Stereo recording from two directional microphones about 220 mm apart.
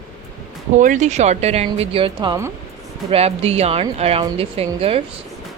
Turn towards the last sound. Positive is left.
turn(degrees=-25)  # may be behind; listen again after turning